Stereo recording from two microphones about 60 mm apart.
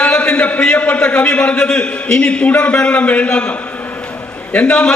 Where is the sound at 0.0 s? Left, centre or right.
Centre.